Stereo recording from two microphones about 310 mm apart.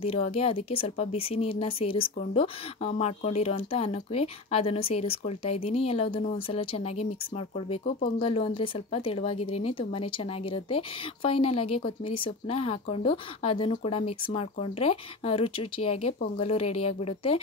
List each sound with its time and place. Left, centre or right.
0.0 s speech: centre